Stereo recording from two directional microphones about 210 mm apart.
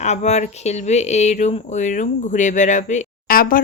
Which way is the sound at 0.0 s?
30° left (ahead or behind).